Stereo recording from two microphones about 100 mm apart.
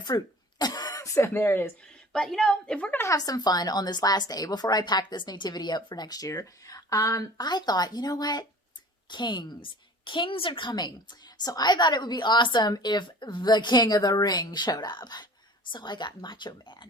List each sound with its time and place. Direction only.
0.1 s speech: 40° left (ahead or behind)
0.6 s throat clearing: 40° left (ahead or behind); by 1.7 s 20° left (ahead or behind)
1.9 s a woman's voice: 5° left (ahead or behind)
3.0 s a woman's voice: 35° left (ahead or behind)